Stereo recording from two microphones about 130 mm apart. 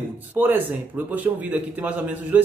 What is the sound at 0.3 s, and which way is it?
A man's voice, 15° right (ahead or behind).